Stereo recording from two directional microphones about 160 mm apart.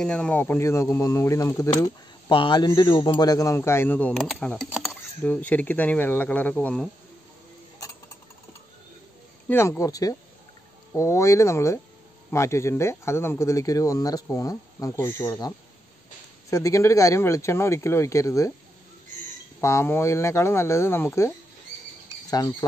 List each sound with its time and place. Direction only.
0.0 s speech: 5° left (ahead or behind)
1.8 s speech: 30° left (ahead or behind); by 4.6 s 5° left (ahead or behind)
4.6 s a sound: 5° right (ahead or behind)
5.2 s speech: 10° left (ahead or behind)
9.5 s speech: 15° left (ahead or behind)
19.6 s speech: 15° left (ahead or behind)
22.3 s speech: 25° left (ahead or behind)